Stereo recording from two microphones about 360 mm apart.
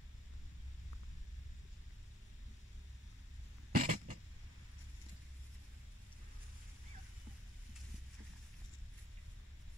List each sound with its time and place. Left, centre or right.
3.7 s cough: right